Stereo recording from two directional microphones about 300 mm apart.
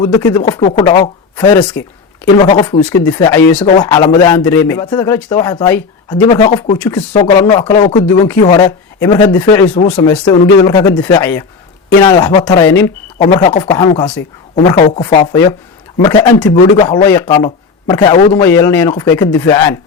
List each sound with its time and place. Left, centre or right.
0.0 s a man's voice: centre
6.7 s a man's voice: centre
7.7 s speech: left
7.9 s a man's voice: centre